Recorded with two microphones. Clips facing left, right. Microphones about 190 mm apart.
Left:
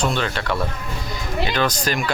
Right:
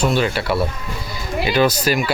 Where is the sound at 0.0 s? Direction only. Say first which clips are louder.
Right 4 dB; 10° right (ahead or behind).